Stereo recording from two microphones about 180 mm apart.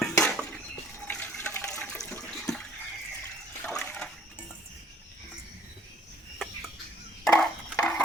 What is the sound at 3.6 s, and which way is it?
Water, 5° left (ahead or behind).